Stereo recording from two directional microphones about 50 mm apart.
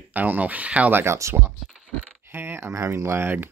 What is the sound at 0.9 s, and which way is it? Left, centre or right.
Speech, right.